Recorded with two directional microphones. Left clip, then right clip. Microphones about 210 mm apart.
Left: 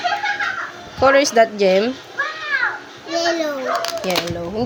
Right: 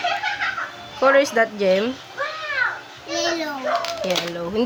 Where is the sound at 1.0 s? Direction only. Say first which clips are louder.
Left 3 dB; 10° left (ahead or behind).